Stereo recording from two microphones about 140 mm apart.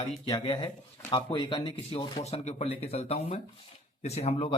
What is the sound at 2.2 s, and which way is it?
Speech, 50° left (ahead or behind).